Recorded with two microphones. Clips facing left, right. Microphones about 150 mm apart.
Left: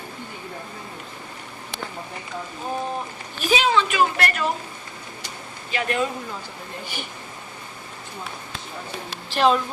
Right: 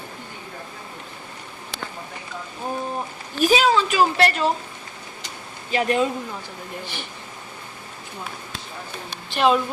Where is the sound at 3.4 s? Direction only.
40° right (ahead or behind).